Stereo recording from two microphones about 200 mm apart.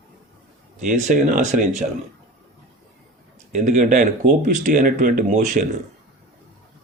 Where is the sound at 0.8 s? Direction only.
35° right (ahead or behind).